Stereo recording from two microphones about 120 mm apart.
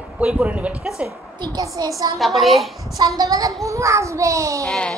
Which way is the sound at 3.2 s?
30° right (ahead or behind).